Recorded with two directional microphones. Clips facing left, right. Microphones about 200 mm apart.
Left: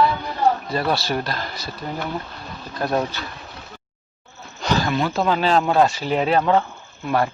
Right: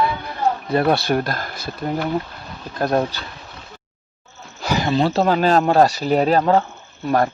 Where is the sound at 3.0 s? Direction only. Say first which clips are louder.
Right 3 dB; 30° right (ahead or behind).